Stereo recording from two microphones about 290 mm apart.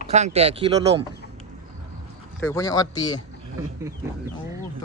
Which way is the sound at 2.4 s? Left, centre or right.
Centre.